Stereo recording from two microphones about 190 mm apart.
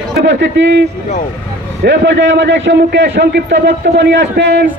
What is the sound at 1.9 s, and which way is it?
A man's voice, 70° right (ahead or behind).